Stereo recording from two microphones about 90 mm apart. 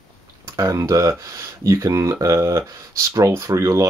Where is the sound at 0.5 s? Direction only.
40° right (ahead or behind).